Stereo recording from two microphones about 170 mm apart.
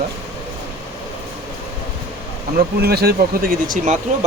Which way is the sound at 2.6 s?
70° right (ahead or behind).